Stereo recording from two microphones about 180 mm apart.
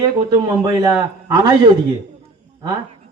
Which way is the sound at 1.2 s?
25° right (ahead or behind).